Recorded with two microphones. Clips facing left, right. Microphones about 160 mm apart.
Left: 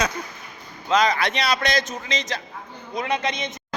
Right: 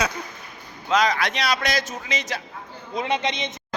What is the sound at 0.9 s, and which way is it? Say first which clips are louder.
A woman's voice: left 1 dB; centre (ahead or behind).